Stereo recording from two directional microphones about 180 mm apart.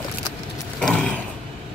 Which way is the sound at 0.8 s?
5° left (ahead or behind).